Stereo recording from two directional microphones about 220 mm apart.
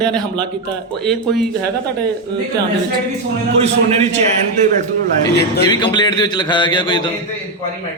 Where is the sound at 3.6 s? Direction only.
30° right (ahead or behind).